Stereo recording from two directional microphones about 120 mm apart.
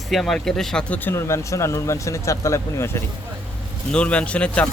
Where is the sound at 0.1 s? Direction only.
Centre (ahead or behind); by 3.0 s 25° left (ahead or behind).